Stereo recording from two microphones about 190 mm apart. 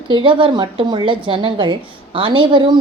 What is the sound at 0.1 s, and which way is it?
A woman's voice, 25° right (ahead or behind).